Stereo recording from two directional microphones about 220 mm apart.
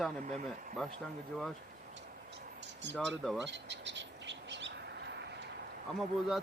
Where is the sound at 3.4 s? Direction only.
55° right (ahead or behind).